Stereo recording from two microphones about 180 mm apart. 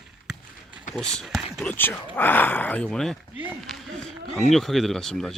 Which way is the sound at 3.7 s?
Centre (ahead or behind).